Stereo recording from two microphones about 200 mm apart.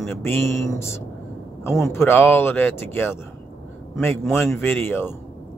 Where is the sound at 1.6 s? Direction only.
15° left (ahead or behind).